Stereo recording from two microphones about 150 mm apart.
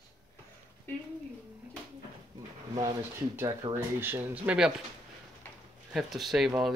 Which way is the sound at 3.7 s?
15° right (ahead or behind).